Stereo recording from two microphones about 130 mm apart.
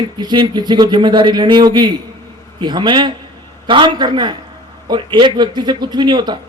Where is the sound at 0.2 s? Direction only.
35° right (ahead or behind).